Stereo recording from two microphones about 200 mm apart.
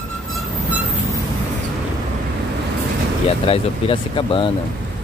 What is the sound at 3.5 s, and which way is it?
Speech, 25° left (ahead or behind).